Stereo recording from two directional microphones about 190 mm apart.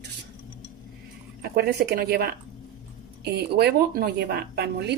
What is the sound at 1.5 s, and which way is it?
A woman's voice, 60° right (ahead or behind).